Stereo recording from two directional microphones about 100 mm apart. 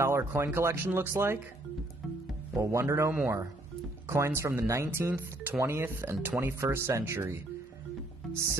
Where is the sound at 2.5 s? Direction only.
30° right (ahead or behind).